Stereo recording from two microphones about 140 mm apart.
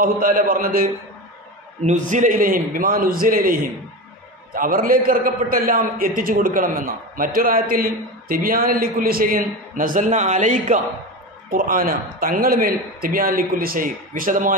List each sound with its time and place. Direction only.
0.0 s a man's voice: 85° right
1.8 s a man's voice: 60° right (ahead or behind)
11.5 s a man's voice: 80° right